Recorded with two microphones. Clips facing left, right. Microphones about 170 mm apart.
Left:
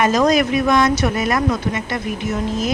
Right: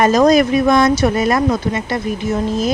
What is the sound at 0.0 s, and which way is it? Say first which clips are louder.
A woman's voice: right 4 dB; 35° right (ahead or behind).